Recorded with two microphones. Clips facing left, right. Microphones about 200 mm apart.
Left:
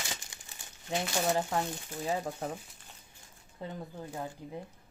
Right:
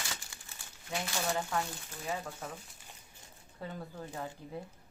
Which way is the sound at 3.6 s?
15° left (ahead or behind).